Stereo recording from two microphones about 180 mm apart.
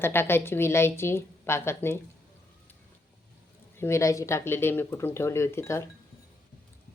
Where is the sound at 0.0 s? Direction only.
10° left (ahead or behind).